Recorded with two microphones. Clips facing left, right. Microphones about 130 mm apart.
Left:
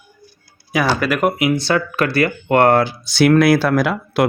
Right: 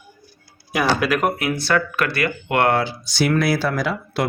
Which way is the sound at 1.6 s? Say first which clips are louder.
Left 3 dB; 30° left (ahead or behind).